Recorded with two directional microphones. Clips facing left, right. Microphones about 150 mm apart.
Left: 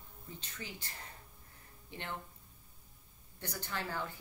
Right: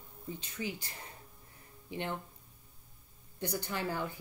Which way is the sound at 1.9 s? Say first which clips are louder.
Right 7 dB; 15° right (ahead or behind).